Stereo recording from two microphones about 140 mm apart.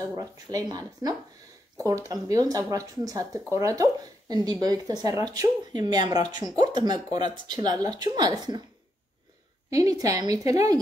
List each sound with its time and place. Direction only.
0.1 s speech: 25° right (ahead or behind)
9.7 s speech: 25° right (ahead or behind)